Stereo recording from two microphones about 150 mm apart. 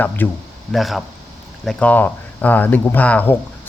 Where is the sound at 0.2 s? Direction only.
15° left (ahead or behind).